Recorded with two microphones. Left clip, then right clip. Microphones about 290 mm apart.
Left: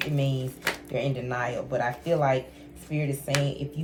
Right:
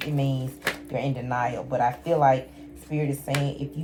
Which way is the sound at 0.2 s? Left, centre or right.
Centre.